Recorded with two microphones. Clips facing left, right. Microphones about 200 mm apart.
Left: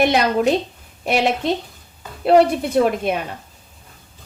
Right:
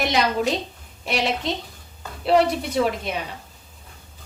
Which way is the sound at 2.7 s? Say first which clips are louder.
Left 7 dB; 55° left (ahead or behind).